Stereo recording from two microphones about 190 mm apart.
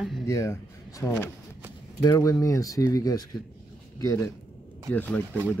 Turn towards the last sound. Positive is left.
turn(degrees=10)  # may be behind; listen again after turning